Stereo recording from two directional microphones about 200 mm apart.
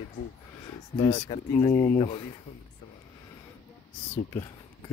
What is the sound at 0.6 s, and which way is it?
Speech, 25° left (ahead or behind).